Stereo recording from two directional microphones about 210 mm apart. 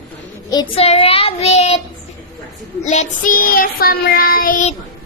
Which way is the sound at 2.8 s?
35° left (ahead or behind).